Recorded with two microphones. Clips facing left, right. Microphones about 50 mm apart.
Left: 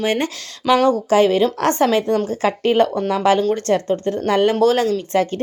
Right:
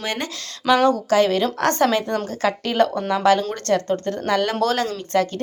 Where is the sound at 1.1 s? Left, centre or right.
Centre.